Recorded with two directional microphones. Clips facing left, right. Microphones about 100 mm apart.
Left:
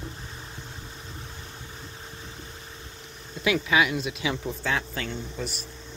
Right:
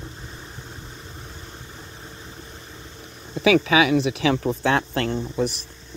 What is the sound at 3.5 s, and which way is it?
Speech, 90° right.